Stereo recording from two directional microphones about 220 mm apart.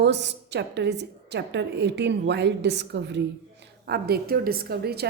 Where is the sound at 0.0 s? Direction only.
50° right (ahead or behind).